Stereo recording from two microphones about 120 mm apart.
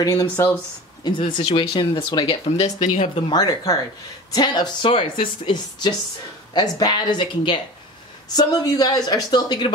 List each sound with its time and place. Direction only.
0.0 s speech: 30° left (ahead or behind)
1.0 s speech: 45° left (ahead or behind)
2.5 s speech: 65° left (ahead or behind)
3.3 s speech: 30° left (ahead or behind)
8.4 s speech: 30° left (ahead or behind)